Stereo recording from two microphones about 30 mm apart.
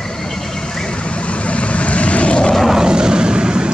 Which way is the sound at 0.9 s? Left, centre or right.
Left.